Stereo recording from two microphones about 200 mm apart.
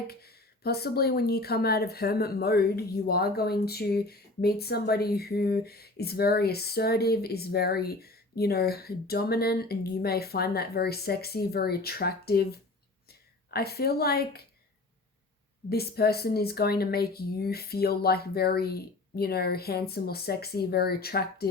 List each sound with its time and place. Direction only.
0.1 s speech: 50° left (ahead or behind)
15.7 s speech: 50° left (ahead or behind)